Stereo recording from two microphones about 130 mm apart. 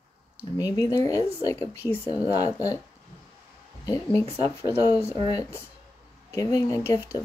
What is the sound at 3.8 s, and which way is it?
Speech, 25° left (ahead or behind).